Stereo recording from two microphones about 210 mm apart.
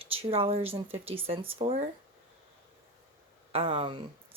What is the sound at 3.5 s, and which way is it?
Speech, 25° right (ahead or behind).